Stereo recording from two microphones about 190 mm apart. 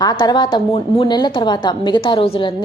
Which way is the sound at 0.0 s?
20° left (ahead or behind).